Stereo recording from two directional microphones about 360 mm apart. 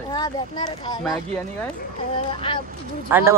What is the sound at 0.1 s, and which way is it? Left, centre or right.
Speech, centre.